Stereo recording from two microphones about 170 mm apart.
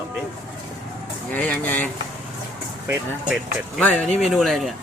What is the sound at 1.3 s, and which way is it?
Speech, 10° left (ahead or behind).